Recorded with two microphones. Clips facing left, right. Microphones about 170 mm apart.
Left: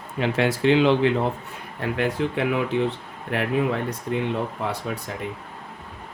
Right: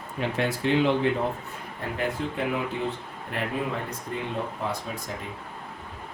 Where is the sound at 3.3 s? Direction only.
70° left (ahead or behind).